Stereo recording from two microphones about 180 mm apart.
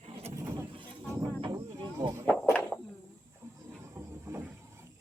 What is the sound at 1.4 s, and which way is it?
Snake, 20° right (ahead or behind).